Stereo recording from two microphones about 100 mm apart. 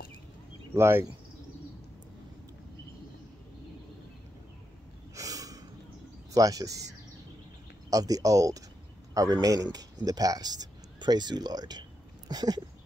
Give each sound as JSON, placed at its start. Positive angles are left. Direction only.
{"t": 0.7, "sound": "speech", "side_deg": -25}
{"t": 5.1, "sound": "snort", "side_deg": -35}
{"t": 6.3, "sound": "speech", "side_deg": -35}